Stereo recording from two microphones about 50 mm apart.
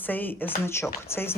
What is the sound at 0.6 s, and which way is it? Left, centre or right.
Speech, left.